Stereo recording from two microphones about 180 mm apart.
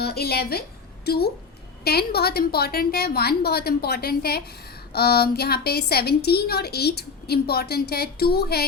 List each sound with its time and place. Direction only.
0.0 s a woman's voice: 60° left (ahead or behind)